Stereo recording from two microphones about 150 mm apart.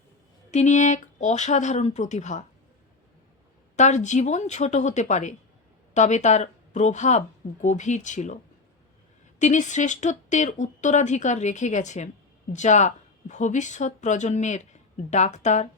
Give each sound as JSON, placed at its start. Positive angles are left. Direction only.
{"t": 0.5, "sound": "speech", "side_deg": 50}
{"t": 3.8, "sound": "speech", "side_deg": 50}
{"t": 9.4, "sound": "speech", "side_deg": 55}